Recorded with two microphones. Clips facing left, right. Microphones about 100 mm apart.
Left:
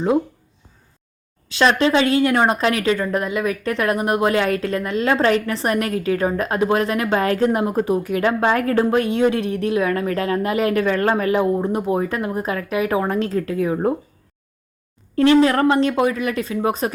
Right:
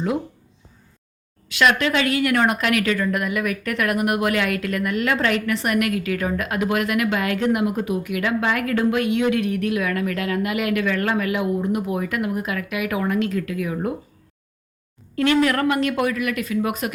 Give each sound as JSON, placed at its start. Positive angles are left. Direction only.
{"t": 1.5, "sound": "speech", "side_deg": 30}
{"t": 15.1, "sound": "speech", "side_deg": 30}